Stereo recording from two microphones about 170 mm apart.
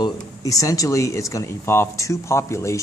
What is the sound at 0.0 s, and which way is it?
Speech, 20° left (ahead or behind).